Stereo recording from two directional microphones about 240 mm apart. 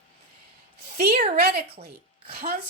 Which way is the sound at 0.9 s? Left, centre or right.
Right.